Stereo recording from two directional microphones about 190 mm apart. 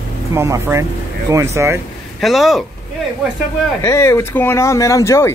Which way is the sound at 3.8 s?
15° left (ahead or behind).